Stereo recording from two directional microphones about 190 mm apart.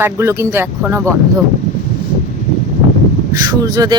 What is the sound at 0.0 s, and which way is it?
Speech, 15° right (ahead or behind).